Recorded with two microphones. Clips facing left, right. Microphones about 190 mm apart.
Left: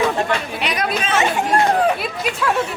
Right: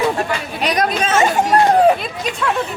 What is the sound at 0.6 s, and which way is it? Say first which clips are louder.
Speech: right 5 dB; 40° right (ahead or behind).